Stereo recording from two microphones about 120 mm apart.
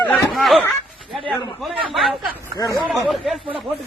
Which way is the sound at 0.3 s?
Centre (ahead or behind).